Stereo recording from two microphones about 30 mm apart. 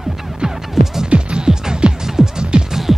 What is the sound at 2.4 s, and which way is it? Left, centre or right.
Music, right.